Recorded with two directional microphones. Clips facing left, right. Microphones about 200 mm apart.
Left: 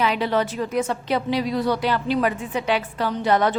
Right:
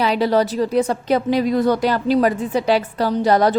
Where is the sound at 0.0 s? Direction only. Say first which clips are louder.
Right 5 dB; 35° right (ahead or behind).